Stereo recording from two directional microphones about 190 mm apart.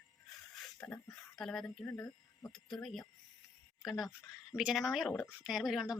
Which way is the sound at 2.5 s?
Centre (ahead or behind).